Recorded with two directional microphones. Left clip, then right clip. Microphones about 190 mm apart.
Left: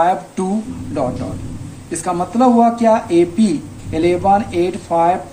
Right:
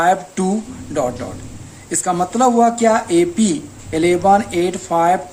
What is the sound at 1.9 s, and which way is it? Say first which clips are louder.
Speech: right 1 dB; 35° right (ahead or behind).